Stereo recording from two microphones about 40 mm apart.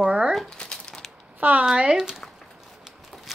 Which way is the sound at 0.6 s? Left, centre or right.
Centre.